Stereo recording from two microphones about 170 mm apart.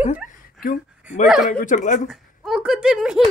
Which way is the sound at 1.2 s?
Centre (ahead or behind).